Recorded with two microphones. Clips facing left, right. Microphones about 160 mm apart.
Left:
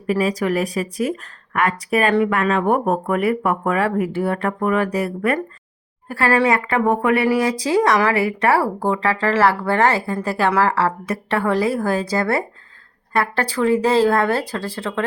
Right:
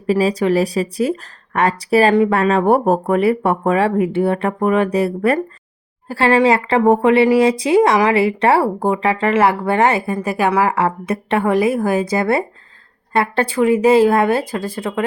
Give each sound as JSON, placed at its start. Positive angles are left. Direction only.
{"t": 0.1, "sound": "speech", "side_deg": -30}